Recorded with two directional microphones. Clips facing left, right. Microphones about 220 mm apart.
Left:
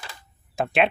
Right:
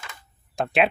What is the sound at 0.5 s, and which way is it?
Speech, centre (ahead or behind).